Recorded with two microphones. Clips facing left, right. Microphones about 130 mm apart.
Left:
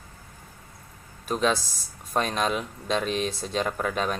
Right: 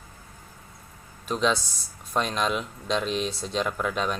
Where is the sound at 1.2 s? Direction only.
50° left (ahead or behind).